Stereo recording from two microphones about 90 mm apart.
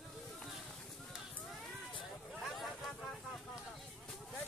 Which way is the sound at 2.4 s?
Centre (ahead or behind).